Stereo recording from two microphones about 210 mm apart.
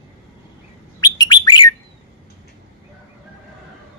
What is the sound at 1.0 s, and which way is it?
Bird, 20° left (ahead or behind).